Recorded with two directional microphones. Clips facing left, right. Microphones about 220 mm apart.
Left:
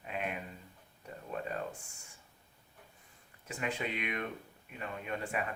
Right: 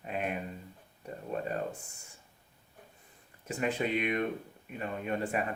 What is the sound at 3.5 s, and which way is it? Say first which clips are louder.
Speech: right 6 dB; 40° right (ahead or behind).